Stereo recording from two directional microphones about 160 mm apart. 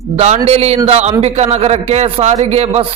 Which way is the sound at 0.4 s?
40° right (ahead or behind).